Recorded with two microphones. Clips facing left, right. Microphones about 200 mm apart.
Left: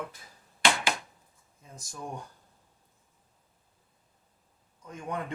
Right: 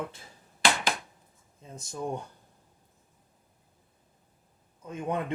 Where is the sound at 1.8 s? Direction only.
25° right (ahead or behind).